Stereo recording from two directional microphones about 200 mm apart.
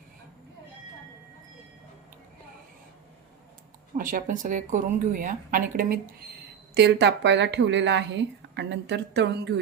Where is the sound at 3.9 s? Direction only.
40° right (ahead or behind).